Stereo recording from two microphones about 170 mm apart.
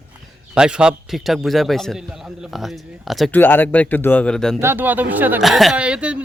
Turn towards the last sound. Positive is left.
turn(degrees=-5)  # may be behind; listen again after turning